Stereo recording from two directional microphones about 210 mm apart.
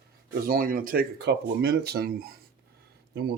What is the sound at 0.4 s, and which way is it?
Speech, 45° right (ahead or behind).